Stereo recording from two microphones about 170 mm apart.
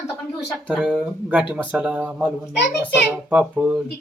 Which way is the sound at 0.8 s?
5° right (ahead or behind).